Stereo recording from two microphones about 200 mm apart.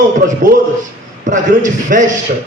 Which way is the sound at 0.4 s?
40° right (ahead or behind).